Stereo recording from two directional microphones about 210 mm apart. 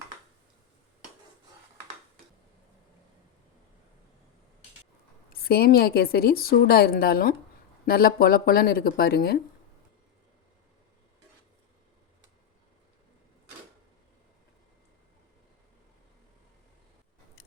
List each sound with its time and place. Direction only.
5.3 s a woman's voice: 45° left (ahead or behind)